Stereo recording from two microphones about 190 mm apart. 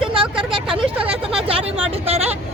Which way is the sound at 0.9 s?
5° right (ahead or behind).